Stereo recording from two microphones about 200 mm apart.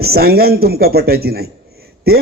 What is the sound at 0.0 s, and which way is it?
A man's voice, 50° right (ahead or behind).